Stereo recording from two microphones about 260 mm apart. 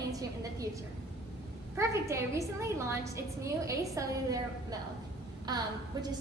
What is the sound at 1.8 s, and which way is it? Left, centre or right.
A woman's voice, centre.